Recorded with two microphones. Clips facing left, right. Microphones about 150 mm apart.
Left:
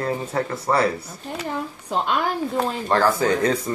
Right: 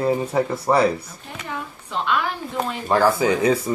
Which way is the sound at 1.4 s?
40° left (ahead or behind).